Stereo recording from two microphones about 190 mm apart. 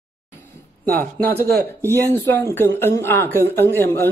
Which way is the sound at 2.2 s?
10° left (ahead or behind).